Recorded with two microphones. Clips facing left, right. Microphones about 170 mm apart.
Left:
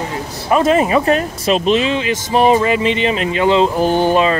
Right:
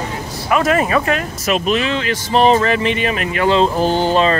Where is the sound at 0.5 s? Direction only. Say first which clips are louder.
Left 3 dB; 25° left (ahead or behind).